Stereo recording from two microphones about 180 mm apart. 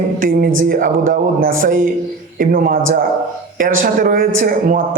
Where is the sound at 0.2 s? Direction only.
55° right (ahead or behind).